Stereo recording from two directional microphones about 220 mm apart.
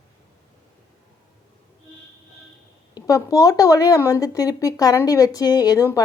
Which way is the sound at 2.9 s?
15° left (ahead or behind).